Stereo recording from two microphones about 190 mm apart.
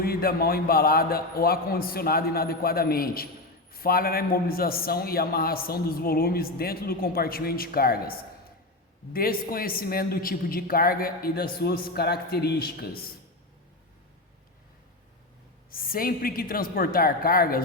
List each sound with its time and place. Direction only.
0.0 s a man's voice: 50° left (ahead or behind)
15.7 s a man's voice: 50° left (ahead or behind)